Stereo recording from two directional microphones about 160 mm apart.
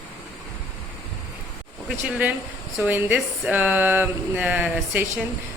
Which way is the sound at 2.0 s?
10° right (ahead or behind).